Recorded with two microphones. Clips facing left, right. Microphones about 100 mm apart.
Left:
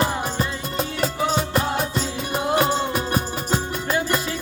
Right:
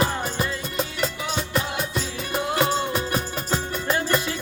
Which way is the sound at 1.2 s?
35° left (ahead or behind).